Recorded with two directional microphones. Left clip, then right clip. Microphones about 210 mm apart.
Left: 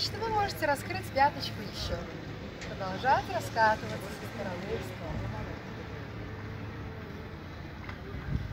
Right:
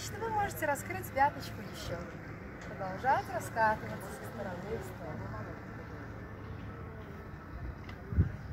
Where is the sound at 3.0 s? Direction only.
15° right (ahead or behind).